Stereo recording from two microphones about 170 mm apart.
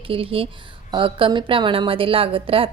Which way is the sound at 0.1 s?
30° right (ahead or behind).